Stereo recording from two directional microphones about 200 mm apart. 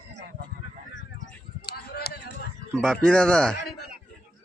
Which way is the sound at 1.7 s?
50° left (ahead or behind).